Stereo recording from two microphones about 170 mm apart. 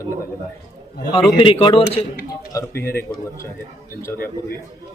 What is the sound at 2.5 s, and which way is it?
Speech, 15° left (ahead or behind).